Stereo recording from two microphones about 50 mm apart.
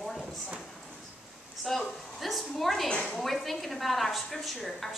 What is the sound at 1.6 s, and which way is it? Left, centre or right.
A woman's voice, centre.